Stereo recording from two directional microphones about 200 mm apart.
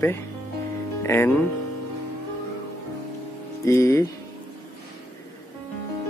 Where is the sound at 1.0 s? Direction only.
10° left (ahead or behind).